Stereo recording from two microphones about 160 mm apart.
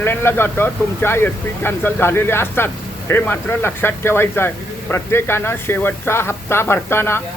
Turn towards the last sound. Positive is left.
turn(degrees=15)  # may be behind; listen again after turning